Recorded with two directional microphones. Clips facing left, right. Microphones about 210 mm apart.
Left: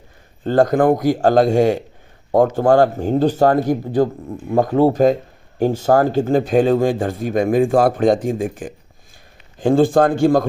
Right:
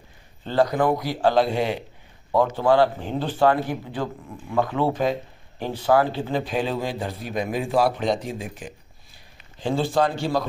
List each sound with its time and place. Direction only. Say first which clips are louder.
0.4 s speech: left 6 dB; 50° left (ahead or behind)